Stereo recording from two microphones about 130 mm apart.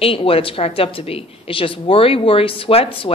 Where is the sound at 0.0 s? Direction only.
45° left (ahead or behind).